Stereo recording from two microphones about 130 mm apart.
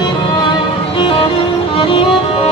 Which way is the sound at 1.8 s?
45° left (ahead or behind).